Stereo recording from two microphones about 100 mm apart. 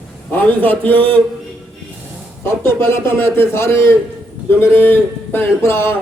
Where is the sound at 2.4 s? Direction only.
25° left (ahead or behind).